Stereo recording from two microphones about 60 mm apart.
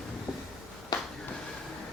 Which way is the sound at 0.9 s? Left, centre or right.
Left.